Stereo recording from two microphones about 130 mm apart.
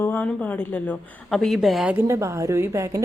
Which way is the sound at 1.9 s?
20° right (ahead or behind).